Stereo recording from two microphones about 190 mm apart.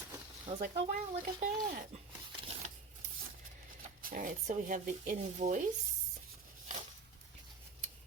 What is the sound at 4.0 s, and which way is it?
Speech, 50° right (ahead or behind).